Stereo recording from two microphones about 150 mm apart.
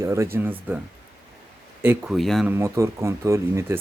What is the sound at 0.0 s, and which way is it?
Speech, 20° right (ahead or behind).